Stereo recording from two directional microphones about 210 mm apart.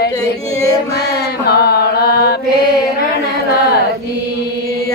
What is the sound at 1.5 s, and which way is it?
Mantra, 50° left (ahead or behind).